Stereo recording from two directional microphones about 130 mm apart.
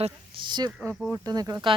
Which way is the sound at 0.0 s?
40° right (ahead or behind).